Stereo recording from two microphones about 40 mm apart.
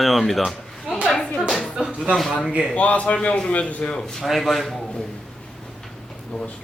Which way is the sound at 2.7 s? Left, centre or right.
Left.